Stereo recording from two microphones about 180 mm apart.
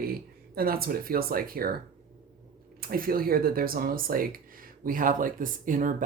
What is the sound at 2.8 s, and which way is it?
Speech, 55° right (ahead or behind).